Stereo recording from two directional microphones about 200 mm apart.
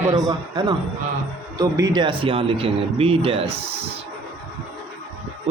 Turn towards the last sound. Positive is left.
turn(degrees=-30)  # may be behind; listen again after turning